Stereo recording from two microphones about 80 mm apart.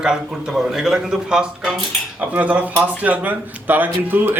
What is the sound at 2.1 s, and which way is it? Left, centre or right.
A man's voice, centre.